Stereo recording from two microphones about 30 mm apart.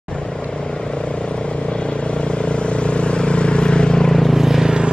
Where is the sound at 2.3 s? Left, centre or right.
Left.